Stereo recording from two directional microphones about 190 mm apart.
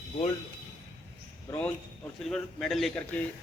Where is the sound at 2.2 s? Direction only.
Centre (ahead or behind).